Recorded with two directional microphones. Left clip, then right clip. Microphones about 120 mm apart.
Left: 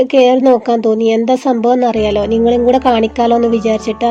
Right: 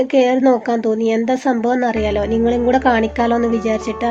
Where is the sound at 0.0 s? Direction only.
35° left (ahead or behind).